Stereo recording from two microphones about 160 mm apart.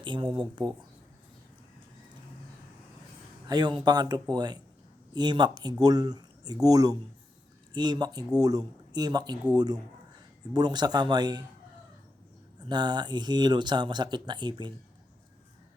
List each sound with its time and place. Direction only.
0.0 s speech: 30° right (ahead or behind)
3.4 s speech: 25° right (ahead or behind)
10.5 s speech: 25° right (ahead or behind)
12.6 s speech: 25° right (ahead or behind)